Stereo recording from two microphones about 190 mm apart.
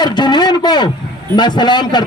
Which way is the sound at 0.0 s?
25° left (ahead or behind).